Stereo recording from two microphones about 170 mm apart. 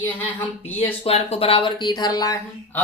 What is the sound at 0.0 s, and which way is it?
Speech, 10° left (ahead or behind).